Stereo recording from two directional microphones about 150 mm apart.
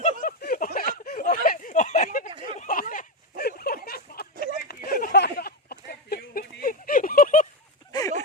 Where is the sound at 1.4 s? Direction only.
65° left (ahead or behind); by 4.3 s 90° left.